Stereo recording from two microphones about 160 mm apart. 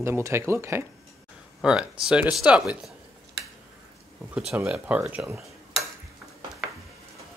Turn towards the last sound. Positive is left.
turn(degrees=0)  # may be behind; listen again after turning